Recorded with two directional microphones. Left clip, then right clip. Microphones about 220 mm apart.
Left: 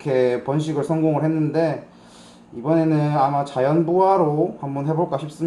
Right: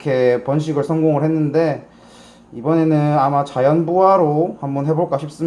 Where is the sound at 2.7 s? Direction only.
30° right (ahead or behind).